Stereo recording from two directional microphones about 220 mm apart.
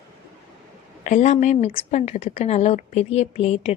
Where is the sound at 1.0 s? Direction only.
35° left (ahead or behind).